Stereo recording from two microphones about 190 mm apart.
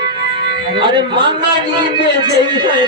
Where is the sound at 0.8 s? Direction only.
25° right (ahead or behind).